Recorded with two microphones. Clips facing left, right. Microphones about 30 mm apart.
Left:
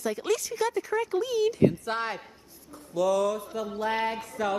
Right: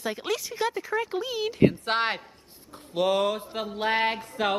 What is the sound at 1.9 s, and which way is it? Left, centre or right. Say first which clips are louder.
Mantra: right 4 dB; right.